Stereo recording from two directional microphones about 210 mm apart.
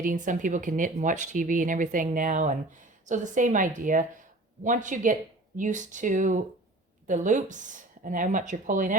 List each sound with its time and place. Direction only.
0.0 s speech: 40° right (ahead or behind)